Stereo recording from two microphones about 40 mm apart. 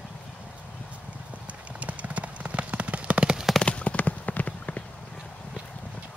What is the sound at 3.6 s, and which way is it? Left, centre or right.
Clip-clop, left.